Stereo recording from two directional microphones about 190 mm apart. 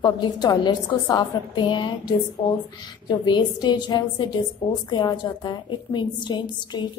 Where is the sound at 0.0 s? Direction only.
20° left (ahead or behind).